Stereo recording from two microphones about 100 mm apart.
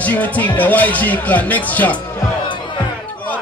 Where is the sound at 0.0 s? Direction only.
15° left (ahead or behind).